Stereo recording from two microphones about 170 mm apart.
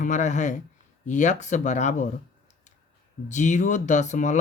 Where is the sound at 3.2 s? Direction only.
45° left (ahead or behind).